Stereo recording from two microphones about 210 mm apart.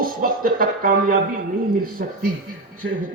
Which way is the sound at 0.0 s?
45° right (ahead or behind).